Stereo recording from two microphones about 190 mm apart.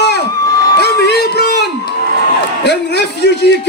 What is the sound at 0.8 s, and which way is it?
Music, 60° left (ahead or behind).